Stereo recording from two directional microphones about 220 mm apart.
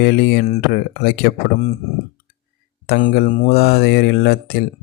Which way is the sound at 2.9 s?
40° left (ahead or behind).